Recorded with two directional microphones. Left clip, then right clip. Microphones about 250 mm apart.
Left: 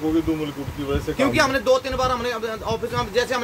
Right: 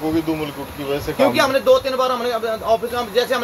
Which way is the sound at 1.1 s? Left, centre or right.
Centre.